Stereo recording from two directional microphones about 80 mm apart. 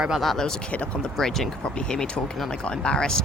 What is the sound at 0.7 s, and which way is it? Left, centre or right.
Speech, centre.